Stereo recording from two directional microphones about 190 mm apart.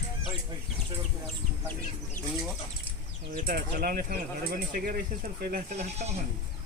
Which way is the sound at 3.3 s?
50° right (ahead or behind).